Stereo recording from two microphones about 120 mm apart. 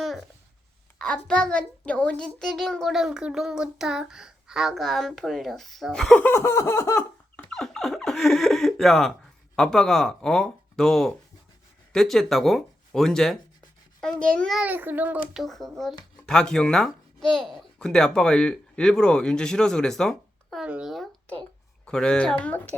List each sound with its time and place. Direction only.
0.9 s a child's voice: 10° left (ahead or behind); by 7.0 s 25° left (ahead or behind)
7.3 s a child's voice: 5° left (ahead or behind)
14.6 s a child's voice: 15° right (ahead or behind); by 20.7 s 5° left (ahead or behind)
20.7 s a child's voice: 10° right (ahead or behind)
21.8 s speech: 5° left (ahead or behind)